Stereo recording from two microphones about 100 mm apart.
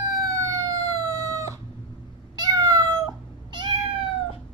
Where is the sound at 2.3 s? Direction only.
40° right (ahead or behind).